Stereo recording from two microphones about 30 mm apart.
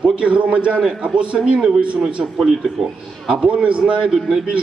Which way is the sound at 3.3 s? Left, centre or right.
Right.